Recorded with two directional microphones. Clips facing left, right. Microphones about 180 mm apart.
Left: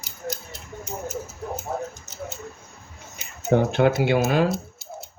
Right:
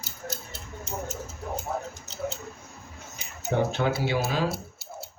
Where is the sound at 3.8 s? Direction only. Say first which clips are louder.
Left 10 dB; 60° left (ahead or behind).